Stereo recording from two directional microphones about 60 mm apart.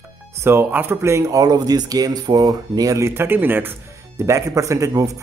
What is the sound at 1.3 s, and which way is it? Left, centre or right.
Speech, right.